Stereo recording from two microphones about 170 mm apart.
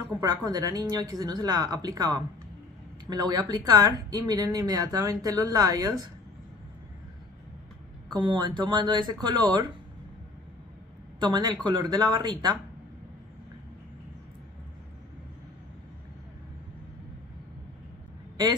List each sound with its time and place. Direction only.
0.0 s a sound: 20° right (ahead or behind)
0.5 s speech: 20° right (ahead or behind)
8.1 s speech: 25° right (ahead or behind)
11.1 s speech: 25° right (ahead or behind)